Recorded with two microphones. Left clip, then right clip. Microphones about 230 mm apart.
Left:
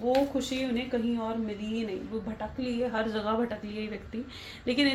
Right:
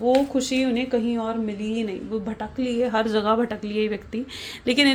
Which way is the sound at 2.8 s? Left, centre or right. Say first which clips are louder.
Right 9 dB; right.